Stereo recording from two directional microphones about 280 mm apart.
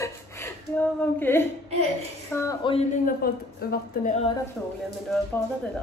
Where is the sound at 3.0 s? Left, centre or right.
Left.